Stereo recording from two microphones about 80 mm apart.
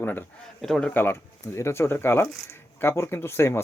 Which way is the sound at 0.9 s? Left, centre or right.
Left.